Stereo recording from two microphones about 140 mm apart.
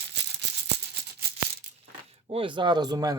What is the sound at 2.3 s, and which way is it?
Speech, 35° right (ahead or behind).